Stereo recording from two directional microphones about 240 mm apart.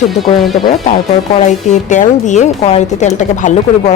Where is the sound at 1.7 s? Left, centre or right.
Left.